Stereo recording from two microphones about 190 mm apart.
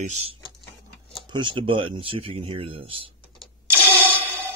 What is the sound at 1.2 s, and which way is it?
Speech, 25° right (ahead or behind).